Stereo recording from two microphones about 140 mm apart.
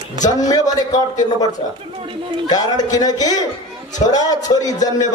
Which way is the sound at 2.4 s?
25° left (ahead or behind).